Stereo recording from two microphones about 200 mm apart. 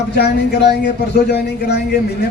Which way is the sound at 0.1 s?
55° left (ahead or behind).